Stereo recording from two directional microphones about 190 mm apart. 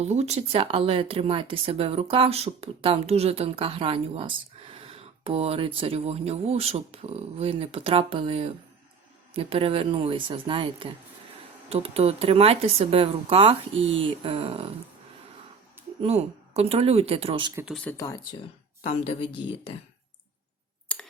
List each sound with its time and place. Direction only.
0.0 s speech: 35° right (ahead or behind)
16.0 s speech: 30° right (ahead or behind)
17.7 s speech: 5° left (ahead or behind)
17.9 s speech: 20° left (ahead or behind)
18.9 s a woman's voice: 30° left (ahead or behind)